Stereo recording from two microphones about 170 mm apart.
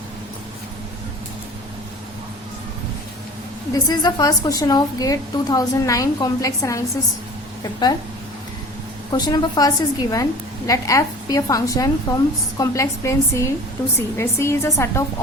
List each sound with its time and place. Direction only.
3.7 s a woman's voice: 20° left (ahead or behind)
9.1 s a woman's voice: 25° left (ahead or behind)